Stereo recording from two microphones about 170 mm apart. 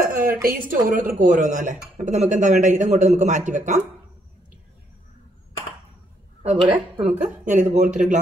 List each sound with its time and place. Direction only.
0.0 s speech: 60° right (ahead or behind)
6.7 s a woman's voice: 35° right (ahead or behind)
7.4 s speech: 50° right (ahead or behind)